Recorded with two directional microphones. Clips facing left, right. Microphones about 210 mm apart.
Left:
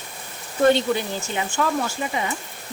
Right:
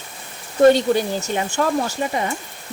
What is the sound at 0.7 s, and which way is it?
Speech, 40° right (ahead or behind).